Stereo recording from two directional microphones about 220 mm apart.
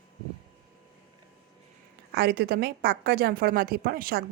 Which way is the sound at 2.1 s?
45° right (ahead or behind).